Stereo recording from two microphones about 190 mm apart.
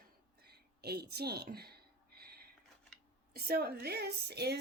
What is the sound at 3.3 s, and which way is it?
Speech, 55° right (ahead or behind).